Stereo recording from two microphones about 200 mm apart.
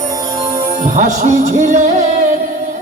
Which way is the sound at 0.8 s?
35° right (ahead or behind).